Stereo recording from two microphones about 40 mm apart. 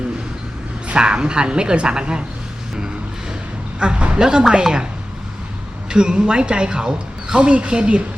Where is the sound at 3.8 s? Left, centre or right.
Right.